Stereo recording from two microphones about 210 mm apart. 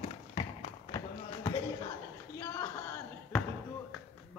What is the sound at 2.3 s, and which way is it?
Basketball bounce, 15° left (ahead or behind).